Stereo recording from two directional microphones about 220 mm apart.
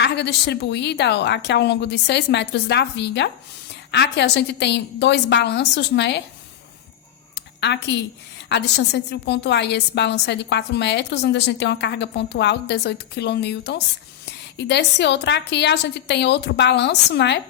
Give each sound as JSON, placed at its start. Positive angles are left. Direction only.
{"t": 0.0, "sound": "a woman's voice", "side_deg": 50}
{"t": 7.3, "sound": "a sound", "side_deg": 50}
{"t": 8.4, "sound": "a woman's voice", "side_deg": 50}